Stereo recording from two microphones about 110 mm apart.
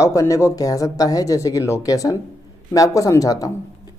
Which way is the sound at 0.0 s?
30° left (ahead or behind).